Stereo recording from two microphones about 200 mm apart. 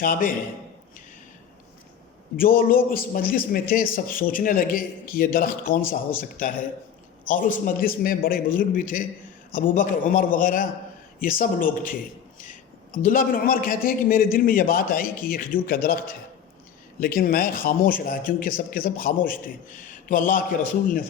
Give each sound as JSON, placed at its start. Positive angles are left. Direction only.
{"t": 0.0, "sound": "a man's voice", "side_deg": 45}
{"t": 2.3, "sound": "a man's voice", "side_deg": 45}